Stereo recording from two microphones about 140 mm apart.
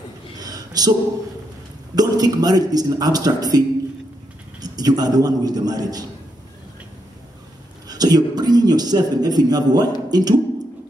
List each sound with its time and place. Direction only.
0.4 s a sound: 25° right (ahead or behind)
2.0 s a man's voice: 25° right (ahead or behind)
7.9 s a man's voice: 30° right (ahead or behind)